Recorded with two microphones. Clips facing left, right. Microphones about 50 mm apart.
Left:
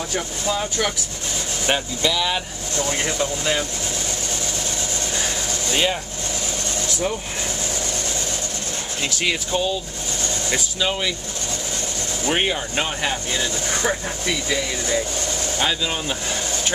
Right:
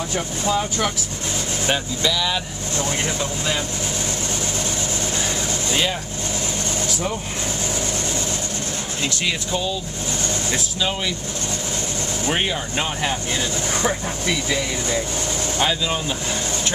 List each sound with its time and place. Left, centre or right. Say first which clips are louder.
1.7 s speech: left 1 dB; centre
9.0 s speech: left 1 dB; centre
12.3 s speech: left 2 dB; centre
13.8 s speech: even; centre